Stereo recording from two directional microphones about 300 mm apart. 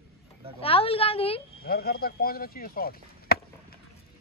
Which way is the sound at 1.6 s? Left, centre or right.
Left.